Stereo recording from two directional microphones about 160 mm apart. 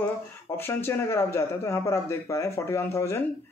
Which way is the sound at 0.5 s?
15° left (ahead or behind).